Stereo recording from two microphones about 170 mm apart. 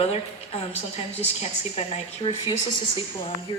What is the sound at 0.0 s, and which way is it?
A woman's voice, 35° left (ahead or behind).